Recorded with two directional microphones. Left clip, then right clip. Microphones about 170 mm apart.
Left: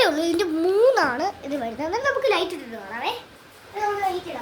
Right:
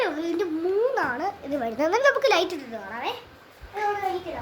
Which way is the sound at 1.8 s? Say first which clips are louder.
Right 3 dB; 40° right (ahead or behind).